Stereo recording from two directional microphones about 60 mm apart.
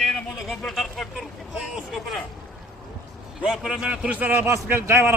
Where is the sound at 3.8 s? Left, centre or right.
Centre.